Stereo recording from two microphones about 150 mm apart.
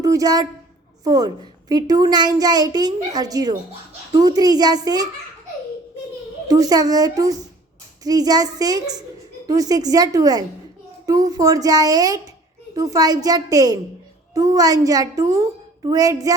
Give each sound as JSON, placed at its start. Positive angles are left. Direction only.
{"t": 0.0, "sound": "a woman's voice", "side_deg": -25}
{"t": 6.5, "sound": "a child's voice", "side_deg": -25}